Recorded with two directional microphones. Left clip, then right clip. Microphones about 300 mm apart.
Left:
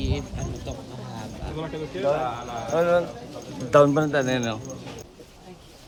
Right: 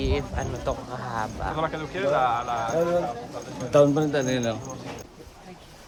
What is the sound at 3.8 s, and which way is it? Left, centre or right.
Speech, left.